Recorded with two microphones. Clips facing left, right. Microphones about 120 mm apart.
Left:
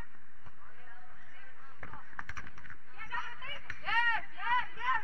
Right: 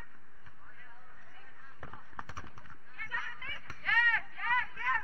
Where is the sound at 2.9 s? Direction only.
40° left (ahead or behind).